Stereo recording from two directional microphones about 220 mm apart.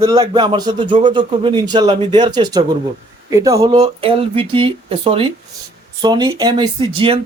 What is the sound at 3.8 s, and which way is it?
Speech, 25° right (ahead or behind).